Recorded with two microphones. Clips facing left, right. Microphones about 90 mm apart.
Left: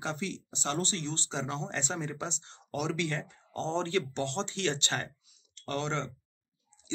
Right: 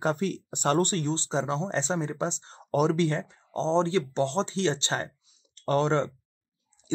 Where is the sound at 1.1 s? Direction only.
35° right (ahead or behind).